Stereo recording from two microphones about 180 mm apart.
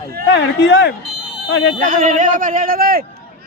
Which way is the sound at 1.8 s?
50° right (ahead or behind).